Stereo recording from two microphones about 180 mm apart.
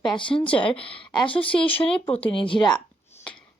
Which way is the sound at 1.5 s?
30° left (ahead or behind).